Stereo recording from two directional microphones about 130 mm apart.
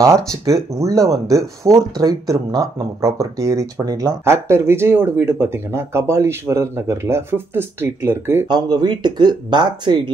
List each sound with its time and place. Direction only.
0.0 s speech: 25° right (ahead or behind)
8.5 s speech: 30° right (ahead or behind)